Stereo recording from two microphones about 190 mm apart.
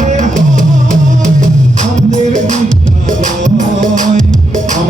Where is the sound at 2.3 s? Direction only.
40° right (ahead or behind).